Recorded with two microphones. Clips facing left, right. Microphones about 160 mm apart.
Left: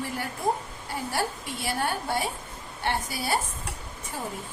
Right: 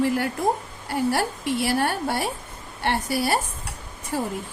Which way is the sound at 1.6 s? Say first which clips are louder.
Right 4 dB; 70° right (ahead or behind).